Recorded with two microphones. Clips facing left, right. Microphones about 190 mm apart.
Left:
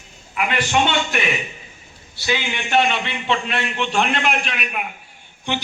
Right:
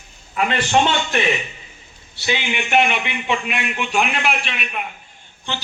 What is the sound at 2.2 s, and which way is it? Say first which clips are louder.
A man's voice: right 1 dB; 20° right (ahead or behind).